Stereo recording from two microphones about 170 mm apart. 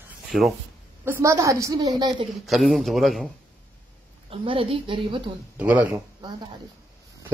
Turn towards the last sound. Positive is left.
turn(degrees=-10)  # may be behind; listen again after turning